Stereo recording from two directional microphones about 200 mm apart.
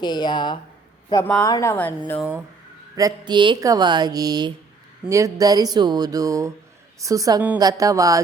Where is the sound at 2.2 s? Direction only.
5° right (ahead or behind).